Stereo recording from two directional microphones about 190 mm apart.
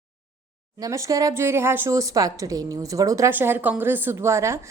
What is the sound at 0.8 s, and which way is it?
Speech, 15° right (ahead or behind).